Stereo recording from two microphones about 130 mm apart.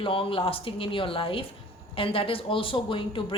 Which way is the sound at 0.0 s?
45° left (ahead or behind).